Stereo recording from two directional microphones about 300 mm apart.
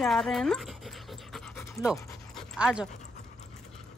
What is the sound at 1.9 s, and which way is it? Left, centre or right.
Dog, centre.